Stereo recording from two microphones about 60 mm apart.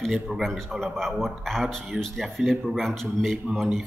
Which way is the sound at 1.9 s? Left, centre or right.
Centre.